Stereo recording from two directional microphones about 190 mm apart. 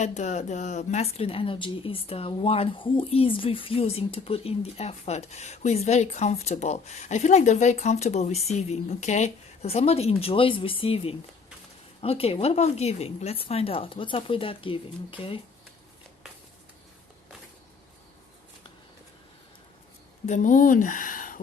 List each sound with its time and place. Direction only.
0.0 s speech: 35° left (ahead or behind)
20.2 s speech: 40° left (ahead or behind)